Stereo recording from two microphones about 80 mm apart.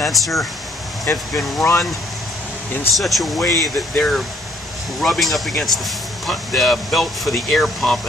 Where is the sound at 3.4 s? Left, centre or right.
Left.